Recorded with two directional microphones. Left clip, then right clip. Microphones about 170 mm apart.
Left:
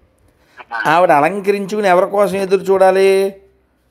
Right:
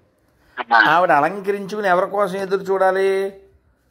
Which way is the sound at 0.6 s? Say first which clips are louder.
Right 9 dB; 60° right (ahead or behind).